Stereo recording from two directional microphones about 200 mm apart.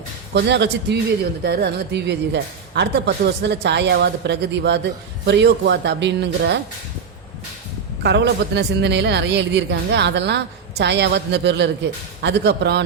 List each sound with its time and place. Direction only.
0.3 s speech: 60° right (ahead or behind)
8.0 s speech: 55° right (ahead or behind)